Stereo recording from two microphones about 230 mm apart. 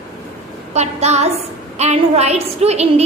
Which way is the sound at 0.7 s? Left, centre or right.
Right.